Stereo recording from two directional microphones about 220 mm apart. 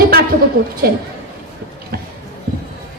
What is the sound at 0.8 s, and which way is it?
Speech, 45° right (ahead or behind).